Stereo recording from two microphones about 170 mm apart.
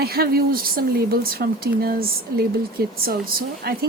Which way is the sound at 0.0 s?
65° right (ahead or behind).